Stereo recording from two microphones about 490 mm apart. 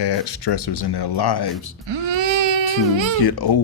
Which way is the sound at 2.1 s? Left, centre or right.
Right.